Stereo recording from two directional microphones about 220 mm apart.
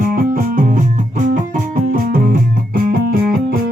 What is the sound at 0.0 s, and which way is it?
Music, 40° right (ahead or behind).